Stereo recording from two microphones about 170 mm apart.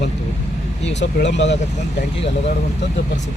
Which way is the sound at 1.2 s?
90° left.